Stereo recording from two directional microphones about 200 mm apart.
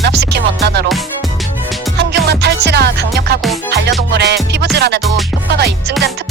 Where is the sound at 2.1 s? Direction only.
55° right (ahead or behind).